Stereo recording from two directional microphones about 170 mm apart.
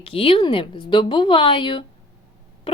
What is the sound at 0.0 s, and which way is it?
A woman's voice, 35° left (ahead or behind).